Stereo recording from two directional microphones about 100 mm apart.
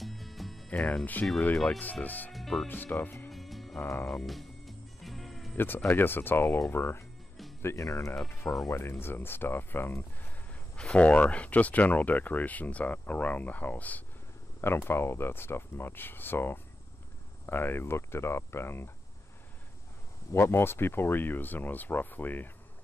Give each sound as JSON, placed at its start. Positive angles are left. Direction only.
{"t": 0.0, "sound": "music", "side_deg": 0}
{"t": 0.7, "sound": "speech", "side_deg": 15}
{"t": 2.3, "sound": "music", "side_deg": 0}
{"t": 2.7, "sound": "speech", "side_deg": 20}
{"t": 3.3, "sound": "music", "side_deg": 0}
{"t": 3.8, "sound": "speech", "side_deg": 25}
{"t": 4.1, "sound": "music", "side_deg": 0}
{"t": 5.9, "sound": "speech", "side_deg": 20}
{"t": 10.8, "sound": "speech", "side_deg": 10}
{"t": 20.3, "sound": "speech", "side_deg": 25}